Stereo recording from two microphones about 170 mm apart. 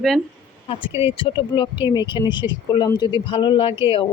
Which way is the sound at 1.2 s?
30° left (ahead or behind).